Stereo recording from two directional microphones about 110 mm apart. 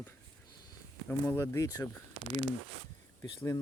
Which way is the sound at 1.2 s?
25° left (ahead or behind).